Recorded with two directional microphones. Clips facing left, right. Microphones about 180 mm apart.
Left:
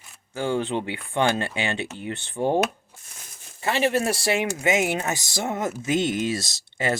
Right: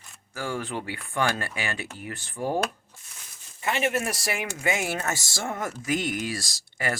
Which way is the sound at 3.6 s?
30° left (ahead or behind).